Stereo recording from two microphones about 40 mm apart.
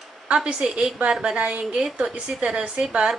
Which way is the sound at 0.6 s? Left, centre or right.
Centre.